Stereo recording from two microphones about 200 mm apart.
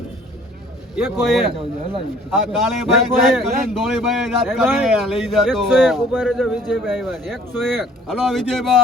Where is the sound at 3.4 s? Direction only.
Centre (ahead or behind).